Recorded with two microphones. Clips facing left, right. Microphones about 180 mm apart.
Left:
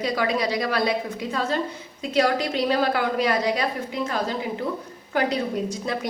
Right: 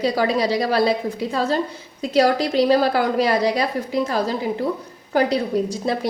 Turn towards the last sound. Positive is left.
turn(degrees=-35)  # may be behind; listen again after turning